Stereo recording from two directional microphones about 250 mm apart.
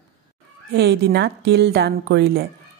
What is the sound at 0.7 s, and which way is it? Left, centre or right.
A woman's voice, right.